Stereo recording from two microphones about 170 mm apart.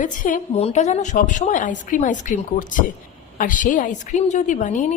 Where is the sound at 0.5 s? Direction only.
40° left (ahead or behind).